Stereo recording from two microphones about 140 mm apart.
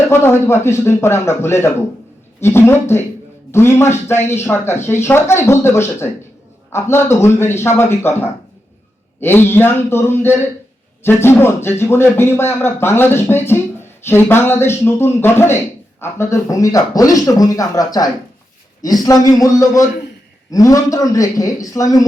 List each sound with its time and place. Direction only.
0.1 s speech: 20° left (ahead or behind)